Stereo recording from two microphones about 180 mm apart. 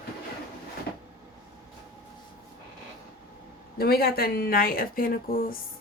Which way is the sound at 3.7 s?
60° left (ahead or behind).